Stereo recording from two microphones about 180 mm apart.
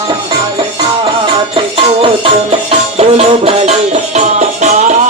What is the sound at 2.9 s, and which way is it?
Music, 35° right (ahead or behind).